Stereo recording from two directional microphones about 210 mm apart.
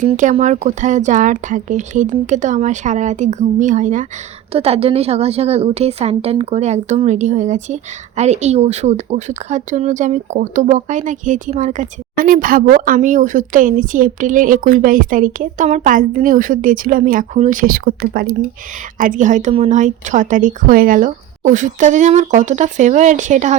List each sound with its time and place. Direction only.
0.0 s a woman's voice: 35° right (ahead or behind)